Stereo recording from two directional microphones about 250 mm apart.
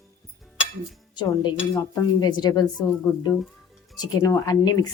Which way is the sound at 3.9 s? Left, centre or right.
Centre.